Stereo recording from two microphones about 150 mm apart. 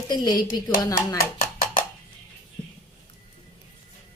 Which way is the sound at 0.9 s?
60° left (ahead or behind).